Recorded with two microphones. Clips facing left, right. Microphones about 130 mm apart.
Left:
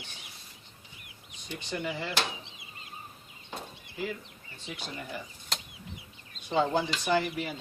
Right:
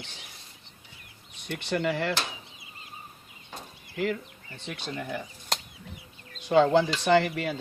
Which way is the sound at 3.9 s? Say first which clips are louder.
Right 7 dB; 65° right (ahead or behind).